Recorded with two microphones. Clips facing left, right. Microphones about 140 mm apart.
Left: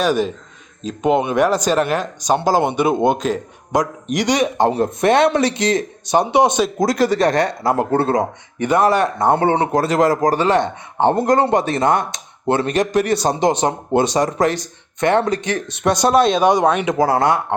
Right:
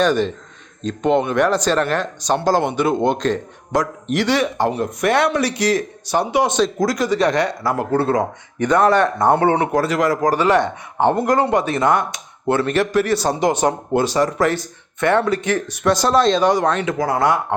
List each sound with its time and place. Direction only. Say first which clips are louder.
0.0 s speech: right 1 dB; 10° left (ahead or behind)
7.0 s speech: left 2 dB; 50° left (ahead or behind)
7.6 s speech: left 2 dB; 25° left (ahead or behind)
8.2 s speech: even; 10° left (ahead or behind)
9.3 s speech: left 1 dB; 25° left (ahead or behind)
17.0 s speech: left 3 dB; 30° left (ahead or behind)